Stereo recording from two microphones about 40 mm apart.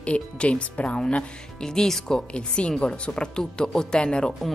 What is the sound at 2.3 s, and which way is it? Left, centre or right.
A woman's voice, left.